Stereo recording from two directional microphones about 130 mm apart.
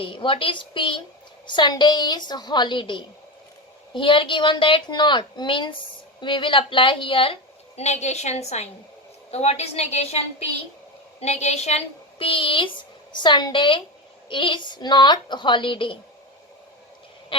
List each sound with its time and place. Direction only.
0.0 s a woman's voice: 40° left (ahead or behind)
7.8 s a woman's voice: 60° left (ahead or behind)
12.2 s a woman's voice: 45° left (ahead or behind)